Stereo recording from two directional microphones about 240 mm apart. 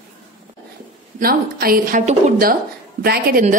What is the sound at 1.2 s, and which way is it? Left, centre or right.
Speech, right.